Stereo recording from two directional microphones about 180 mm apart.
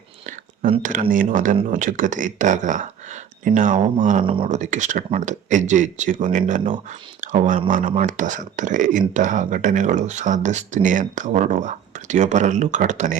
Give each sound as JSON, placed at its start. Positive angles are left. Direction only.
{"t": 0.8, "sound": "speech", "side_deg": -45}
{"t": 4.2, "sound": "speech", "side_deg": -30}
{"t": 4.4, "sound": "speech", "side_deg": -40}